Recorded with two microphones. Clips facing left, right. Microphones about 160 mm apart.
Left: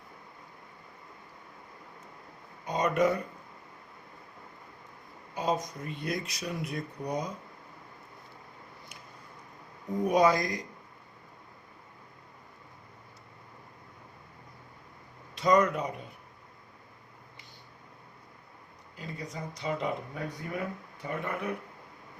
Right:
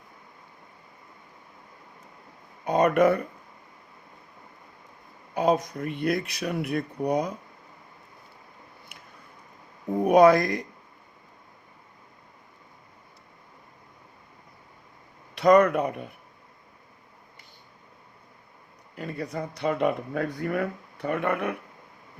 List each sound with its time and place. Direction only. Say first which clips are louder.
2.6 s speech: right 6 dB; 60° right (ahead or behind)
5.3 s speech: right 7 dB; 60° right (ahead or behind)
8.9 s a sound: even; 60° right (ahead or behind)
9.9 s speech: right 7 dB; 60° right (ahead or behind)
15.4 s speech: right 6 dB; 60° right (ahead or behind)
18.9 s speech: right 8 dB; 60° right (ahead or behind)